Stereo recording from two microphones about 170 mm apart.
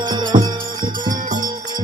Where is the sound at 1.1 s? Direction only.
50° right (ahead or behind).